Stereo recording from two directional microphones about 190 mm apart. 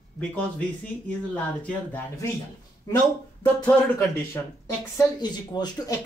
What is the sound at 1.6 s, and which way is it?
Speech, 10° left (ahead or behind).